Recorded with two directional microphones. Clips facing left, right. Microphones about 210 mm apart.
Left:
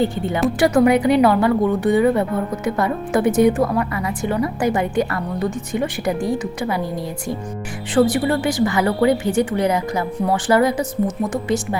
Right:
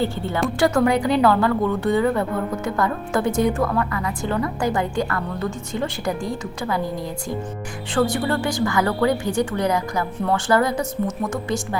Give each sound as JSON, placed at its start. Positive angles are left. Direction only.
{"t": 0.0, "sound": "a woman's voice", "side_deg": 15}
{"t": 7.9, "sound": "a woman's voice", "side_deg": 20}